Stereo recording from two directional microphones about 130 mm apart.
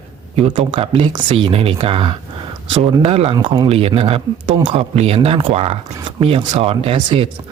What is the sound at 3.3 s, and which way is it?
Speech, 30° right (ahead or behind).